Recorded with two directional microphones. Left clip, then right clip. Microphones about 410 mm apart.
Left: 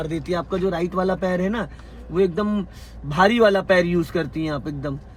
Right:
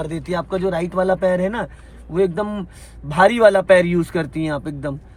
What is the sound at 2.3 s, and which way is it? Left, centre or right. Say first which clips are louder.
Speech: right 1 dB; right.